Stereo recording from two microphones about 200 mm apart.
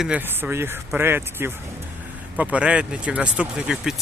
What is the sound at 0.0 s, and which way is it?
Speech, 5° right (ahead or behind).